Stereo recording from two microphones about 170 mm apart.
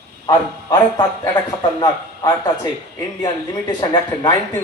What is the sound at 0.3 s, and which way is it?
A man's voice, 25° left (ahead or behind).